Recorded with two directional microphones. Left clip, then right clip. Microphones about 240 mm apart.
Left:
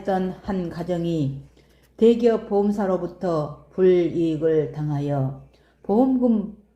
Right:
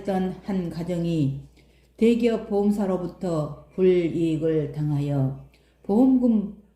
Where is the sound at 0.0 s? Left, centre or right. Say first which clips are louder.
Left 3 dB; left.